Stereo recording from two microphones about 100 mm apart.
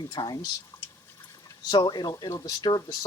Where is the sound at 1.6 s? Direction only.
45° left (ahead or behind).